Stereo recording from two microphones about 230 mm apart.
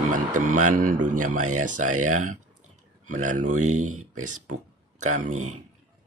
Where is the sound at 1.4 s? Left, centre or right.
Right.